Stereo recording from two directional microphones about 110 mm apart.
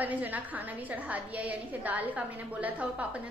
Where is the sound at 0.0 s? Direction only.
15° right (ahead or behind).